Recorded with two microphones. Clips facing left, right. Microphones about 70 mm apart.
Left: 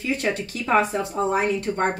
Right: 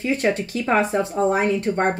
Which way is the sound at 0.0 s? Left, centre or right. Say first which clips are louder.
Right 4 dB; right.